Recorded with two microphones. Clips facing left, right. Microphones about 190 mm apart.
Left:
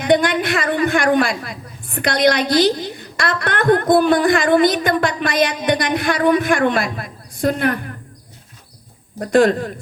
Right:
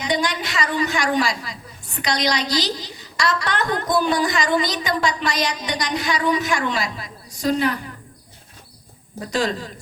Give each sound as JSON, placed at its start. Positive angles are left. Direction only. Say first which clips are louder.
{"t": 0.0, "sound": "a woman's voice", "louder": "left 8 dB", "side_deg": 55}
{"t": 9.2, "sound": "a woman's voice", "louder": "left 10 dB", "side_deg": 55}